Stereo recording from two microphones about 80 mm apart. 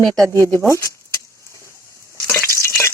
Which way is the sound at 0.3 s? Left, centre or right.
Left.